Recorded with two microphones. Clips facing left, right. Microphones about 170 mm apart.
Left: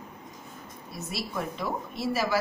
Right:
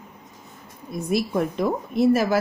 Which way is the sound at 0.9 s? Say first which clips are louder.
Right 12 dB; 50° right (ahead or behind).